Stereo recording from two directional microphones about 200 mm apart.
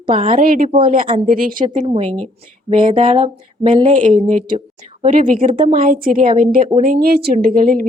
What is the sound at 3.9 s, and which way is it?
A woman's voice, 40° right (ahead or behind).